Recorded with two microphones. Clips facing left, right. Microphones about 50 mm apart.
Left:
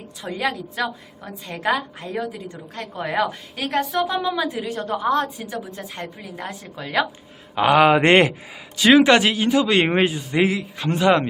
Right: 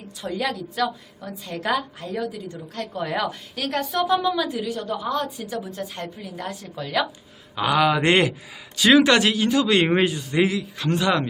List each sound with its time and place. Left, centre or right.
0.2 s a woman's voice: left
4.7 s a woman's voice: left
5.5 s a woman's voice: left
8.9 s a woman's voice: centre